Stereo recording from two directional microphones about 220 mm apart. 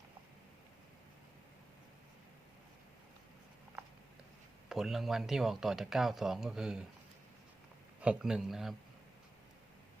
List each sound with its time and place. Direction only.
4.7 s speech: centre (ahead or behind)
8.0 s speech: 5° right (ahead or behind)